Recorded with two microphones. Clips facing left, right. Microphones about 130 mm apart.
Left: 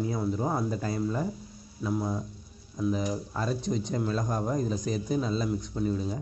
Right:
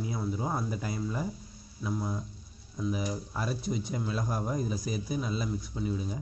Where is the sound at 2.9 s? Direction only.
10° right (ahead or behind).